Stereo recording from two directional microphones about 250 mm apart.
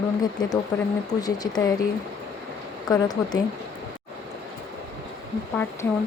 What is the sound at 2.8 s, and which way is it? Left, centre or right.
Speech, centre.